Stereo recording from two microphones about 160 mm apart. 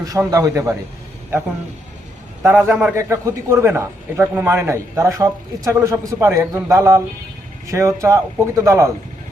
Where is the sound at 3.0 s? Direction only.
20° right (ahead or behind).